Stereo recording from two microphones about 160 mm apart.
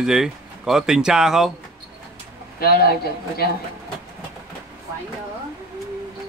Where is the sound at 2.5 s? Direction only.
75° left (ahead or behind).